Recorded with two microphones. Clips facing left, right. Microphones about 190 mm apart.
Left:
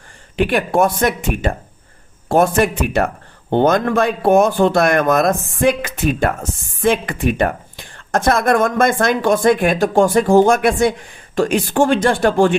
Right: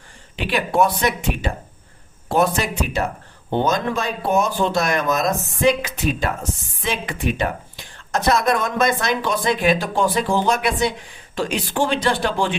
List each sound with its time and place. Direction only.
0.3 s speech: 50° left (ahead or behind)